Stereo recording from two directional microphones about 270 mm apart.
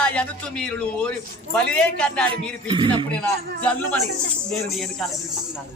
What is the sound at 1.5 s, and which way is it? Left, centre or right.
Music, centre.